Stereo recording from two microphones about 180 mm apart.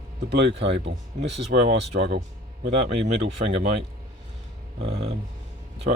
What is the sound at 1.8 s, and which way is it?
Speech, 65° right (ahead or behind).